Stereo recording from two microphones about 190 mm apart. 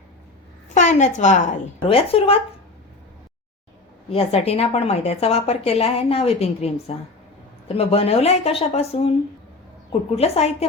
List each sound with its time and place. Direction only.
0.7 s a woman's voice: 40° left (ahead or behind)
4.1 s a woman's voice: 30° left (ahead or behind)